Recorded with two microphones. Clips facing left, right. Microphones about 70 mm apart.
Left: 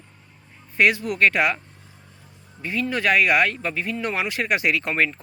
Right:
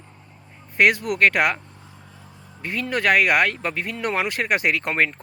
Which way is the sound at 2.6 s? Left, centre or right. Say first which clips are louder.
Even; right.